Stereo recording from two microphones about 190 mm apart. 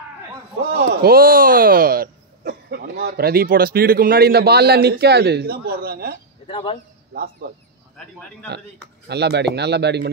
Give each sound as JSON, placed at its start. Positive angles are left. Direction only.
{"t": 0.7, "sound": "speech", "side_deg": -50}
{"t": 6.4, "sound": "speech", "side_deg": 30}
{"t": 7.1, "sound": "speech", "side_deg": -50}
{"t": 9.0, "sound": "speech", "side_deg": -60}